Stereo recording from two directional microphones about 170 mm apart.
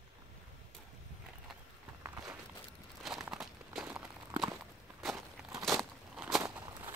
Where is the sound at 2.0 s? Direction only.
15° right (ahead or behind).